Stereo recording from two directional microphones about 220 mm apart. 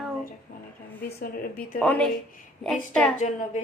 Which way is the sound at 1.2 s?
40° left (ahead or behind).